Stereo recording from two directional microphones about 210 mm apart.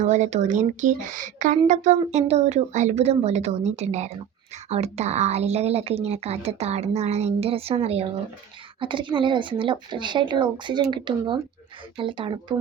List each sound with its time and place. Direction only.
0.0 s a woman's voice: 35° right (ahead or behind)